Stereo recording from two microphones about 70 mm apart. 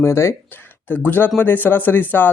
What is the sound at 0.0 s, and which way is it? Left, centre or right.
Speech, left.